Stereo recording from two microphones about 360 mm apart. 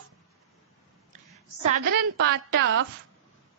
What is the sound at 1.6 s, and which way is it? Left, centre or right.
A woman's voice, right.